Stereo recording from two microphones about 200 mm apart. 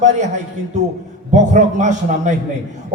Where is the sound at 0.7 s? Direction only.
35° right (ahead or behind).